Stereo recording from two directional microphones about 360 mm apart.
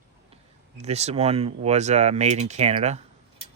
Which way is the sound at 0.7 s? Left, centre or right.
Centre.